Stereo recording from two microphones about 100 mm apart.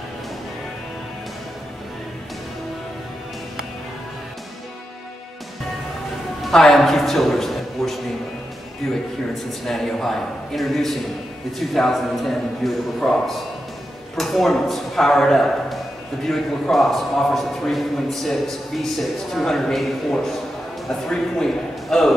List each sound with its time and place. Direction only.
6.4 s speech: 5° left (ahead or behind)
9.3 s a man's voice: 5° left (ahead or behind)